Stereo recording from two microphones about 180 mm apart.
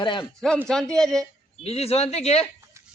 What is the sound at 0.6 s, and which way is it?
Speech, 5° left (ahead or behind).